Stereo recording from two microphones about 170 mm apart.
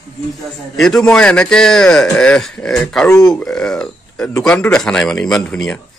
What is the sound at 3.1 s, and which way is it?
Speech, 20° left (ahead or behind).